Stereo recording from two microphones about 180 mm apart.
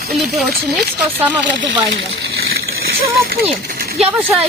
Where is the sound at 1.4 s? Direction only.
90° right.